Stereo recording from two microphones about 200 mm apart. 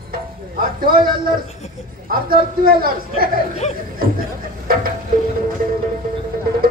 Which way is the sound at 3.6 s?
35° left (ahead or behind).